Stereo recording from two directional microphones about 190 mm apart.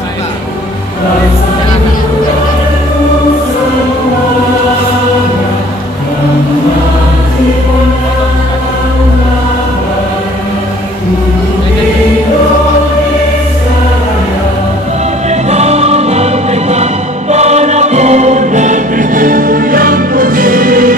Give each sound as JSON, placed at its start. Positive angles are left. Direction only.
{"t": 15.2, "sound": "music", "side_deg": -35}